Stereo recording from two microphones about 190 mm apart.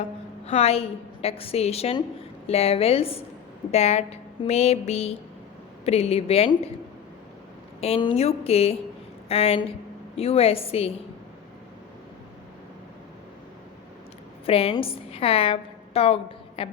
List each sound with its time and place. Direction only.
0.4 s a woman's voice: 35° left (ahead or behind)
7.8 s a woman's voice: 30° left (ahead or behind)
14.4 s a woman's voice: 30° left (ahead or behind)